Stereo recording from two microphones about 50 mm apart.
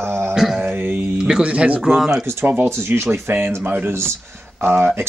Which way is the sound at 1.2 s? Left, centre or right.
Centre.